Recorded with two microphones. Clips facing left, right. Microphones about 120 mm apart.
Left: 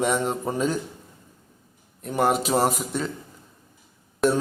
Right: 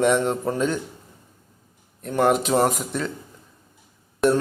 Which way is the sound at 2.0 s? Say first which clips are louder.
Right 2 dB; 5° left (ahead or behind).